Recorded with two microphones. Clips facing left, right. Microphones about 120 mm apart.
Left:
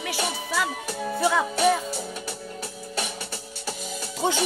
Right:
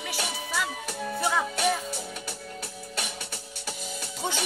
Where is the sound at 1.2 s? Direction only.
90° left.